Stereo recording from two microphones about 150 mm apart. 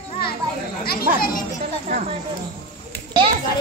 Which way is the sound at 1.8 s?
60° right (ahead or behind).